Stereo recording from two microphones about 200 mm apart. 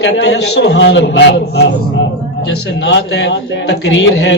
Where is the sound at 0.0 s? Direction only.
60° left (ahead or behind).